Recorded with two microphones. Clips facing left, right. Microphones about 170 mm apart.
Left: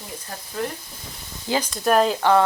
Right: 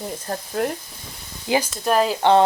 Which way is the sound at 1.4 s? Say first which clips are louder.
Right 3 dB; 15° right (ahead or behind).